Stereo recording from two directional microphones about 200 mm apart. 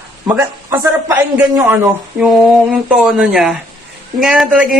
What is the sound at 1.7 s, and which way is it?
A man's voice, 5° right (ahead or behind).